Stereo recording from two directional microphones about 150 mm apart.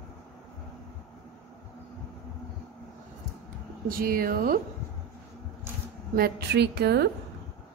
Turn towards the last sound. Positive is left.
turn(degrees=-90)